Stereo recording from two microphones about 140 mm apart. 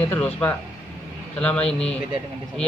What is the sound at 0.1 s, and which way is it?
A man's voice, 15° left (ahead or behind).